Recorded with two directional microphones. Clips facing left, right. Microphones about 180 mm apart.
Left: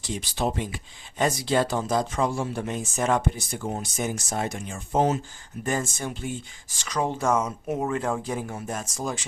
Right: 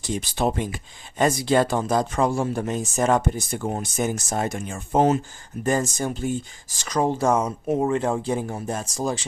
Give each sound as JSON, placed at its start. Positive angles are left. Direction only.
{"t": 0.0, "sound": "speech", "side_deg": -50}
{"t": 5.6, "sound": "speech", "side_deg": -40}